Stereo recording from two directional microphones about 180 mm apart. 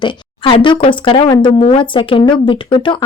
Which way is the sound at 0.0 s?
25° left (ahead or behind).